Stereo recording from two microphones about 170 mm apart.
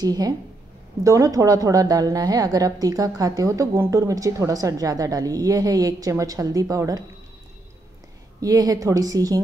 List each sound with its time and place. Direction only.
0.0 s speech: 20° right (ahead or behind)
8.4 s speech: 20° right (ahead or behind)